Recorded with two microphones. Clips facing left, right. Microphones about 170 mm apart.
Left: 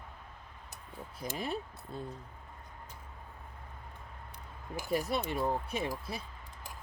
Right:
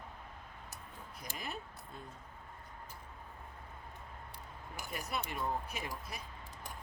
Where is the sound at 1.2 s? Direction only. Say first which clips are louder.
Left 8 dB; 30° left (ahead or behind).